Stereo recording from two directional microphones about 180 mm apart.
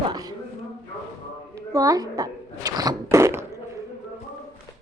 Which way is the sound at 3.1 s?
15° right (ahead or behind).